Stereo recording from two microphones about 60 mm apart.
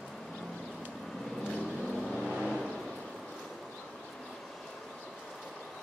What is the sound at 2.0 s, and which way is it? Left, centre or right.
Vehicle, centre.